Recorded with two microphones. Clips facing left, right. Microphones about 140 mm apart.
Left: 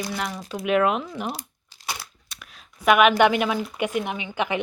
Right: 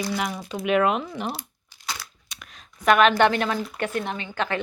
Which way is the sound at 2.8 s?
10° left (ahead or behind).